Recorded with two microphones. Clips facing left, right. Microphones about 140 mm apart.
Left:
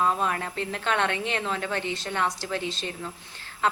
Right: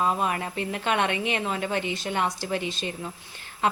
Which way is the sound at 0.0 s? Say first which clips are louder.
Even; 15° right (ahead or behind).